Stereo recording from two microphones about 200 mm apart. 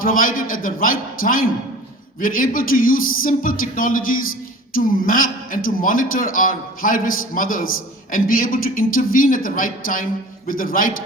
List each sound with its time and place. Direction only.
0.0 s a man's voice: 45° left (ahead or behind)